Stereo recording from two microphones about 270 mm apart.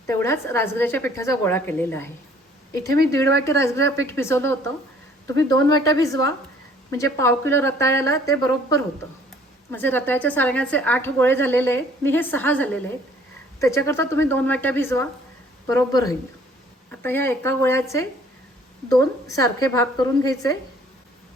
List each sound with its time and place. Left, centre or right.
0.1 s a woman's voice: centre
2.8 s speech: right
3.4 s a woman's voice: centre